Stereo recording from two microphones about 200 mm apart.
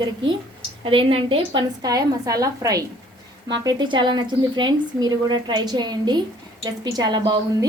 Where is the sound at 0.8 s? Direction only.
25° right (ahead or behind).